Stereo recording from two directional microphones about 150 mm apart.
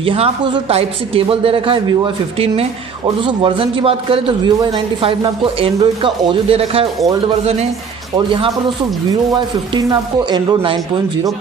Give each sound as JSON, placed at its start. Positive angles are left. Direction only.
{"t": 0.0, "sound": "speech", "side_deg": -35}
{"t": 9.1, "sound": "speech", "side_deg": -25}